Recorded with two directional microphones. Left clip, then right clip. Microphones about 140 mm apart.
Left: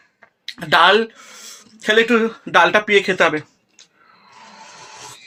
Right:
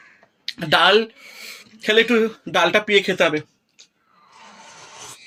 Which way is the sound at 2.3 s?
15° right (ahead or behind).